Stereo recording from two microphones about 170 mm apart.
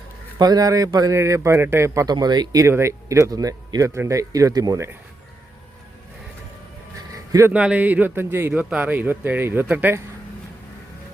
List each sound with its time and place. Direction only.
0.3 s a man's voice: 25° right (ahead or behind)
7.1 s a sound: 20° right (ahead or behind)
7.5 s a man's voice: 5° right (ahead or behind)